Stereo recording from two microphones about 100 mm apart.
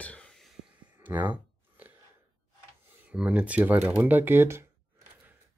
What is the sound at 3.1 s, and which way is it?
Speech, 10° right (ahead or behind).